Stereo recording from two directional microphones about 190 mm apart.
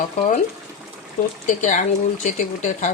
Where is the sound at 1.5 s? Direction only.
40° left (ahead or behind).